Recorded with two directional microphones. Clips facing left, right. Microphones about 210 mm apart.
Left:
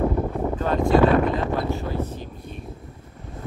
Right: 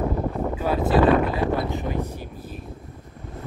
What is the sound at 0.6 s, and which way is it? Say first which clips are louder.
Speech: left 2 dB; 5° right (ahead or behind).